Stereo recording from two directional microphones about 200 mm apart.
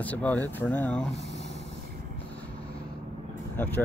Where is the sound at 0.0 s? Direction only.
5° left (ahead or behind).